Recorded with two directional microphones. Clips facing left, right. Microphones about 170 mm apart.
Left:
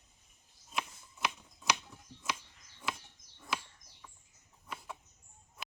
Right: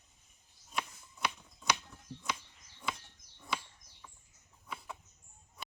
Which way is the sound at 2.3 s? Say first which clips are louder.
Even; centre (ahead or behind).